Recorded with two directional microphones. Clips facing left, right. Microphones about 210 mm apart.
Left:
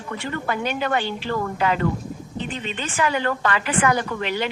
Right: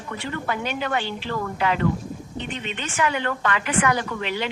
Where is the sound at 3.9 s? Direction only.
50° left (ahead or behind).